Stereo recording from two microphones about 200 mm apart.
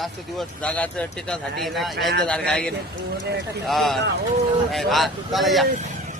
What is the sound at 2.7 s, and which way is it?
Speech, 55° right (ahead or behind).